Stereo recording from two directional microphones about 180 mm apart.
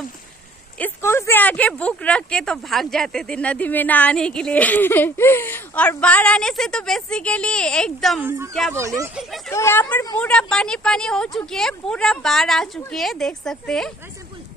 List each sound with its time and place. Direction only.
0.7 s speech: 10° left (ahead or behind)
8.7 s speech: 15° right (ahead or behind)
9.5 s speech: 15° left (ahead or behind)